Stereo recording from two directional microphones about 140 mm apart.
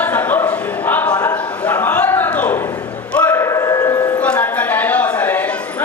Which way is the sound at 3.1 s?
15° left (ahead or behind).